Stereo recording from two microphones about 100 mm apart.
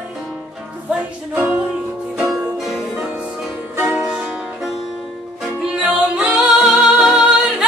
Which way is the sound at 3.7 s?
20° right (ahead or behind).